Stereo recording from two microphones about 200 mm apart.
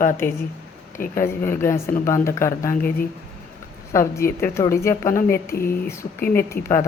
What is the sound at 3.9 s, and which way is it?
A woman's voice, 15° left (ahead or behind).